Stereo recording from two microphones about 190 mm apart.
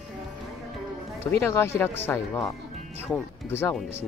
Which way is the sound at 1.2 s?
10° left (ahead or behind).